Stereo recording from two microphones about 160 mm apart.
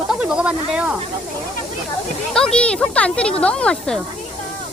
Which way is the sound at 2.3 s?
5° left (ahead or behind).